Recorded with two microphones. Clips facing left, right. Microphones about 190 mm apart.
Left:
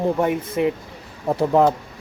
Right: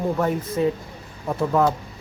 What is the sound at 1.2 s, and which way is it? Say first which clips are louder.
Speech: left 4 dB; 30° left (ahead or behind).